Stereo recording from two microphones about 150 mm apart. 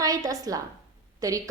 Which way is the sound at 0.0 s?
25° right (ahead or behind).